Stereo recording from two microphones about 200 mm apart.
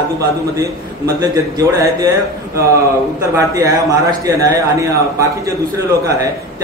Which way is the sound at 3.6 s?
15° right (ahead or behind).